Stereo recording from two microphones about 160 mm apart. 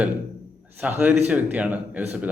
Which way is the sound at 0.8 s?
10° right (ahead or behind).